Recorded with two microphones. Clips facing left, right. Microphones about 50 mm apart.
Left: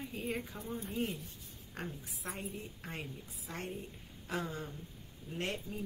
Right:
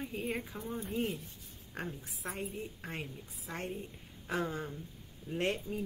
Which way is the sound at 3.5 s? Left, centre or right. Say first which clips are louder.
Right 2 dB; right.